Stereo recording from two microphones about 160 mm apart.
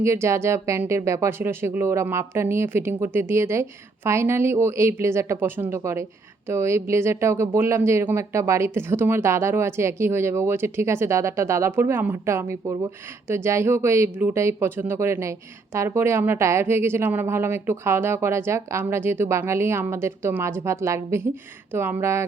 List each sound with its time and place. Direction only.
0.0 s speech: 20° right (ahead or behind)